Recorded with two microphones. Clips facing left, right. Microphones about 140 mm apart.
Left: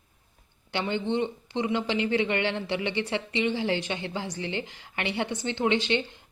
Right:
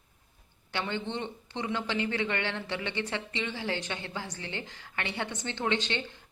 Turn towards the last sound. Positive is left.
turn(degrees=15)  # may be behind; listen again after turning